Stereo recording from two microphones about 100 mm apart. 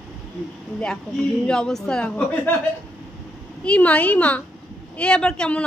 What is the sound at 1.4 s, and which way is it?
Speech, 5° left (ahead or behind).